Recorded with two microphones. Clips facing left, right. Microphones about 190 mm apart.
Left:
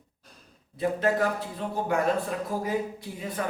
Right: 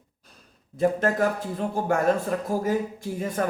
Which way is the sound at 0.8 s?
45° right (ahead or behind).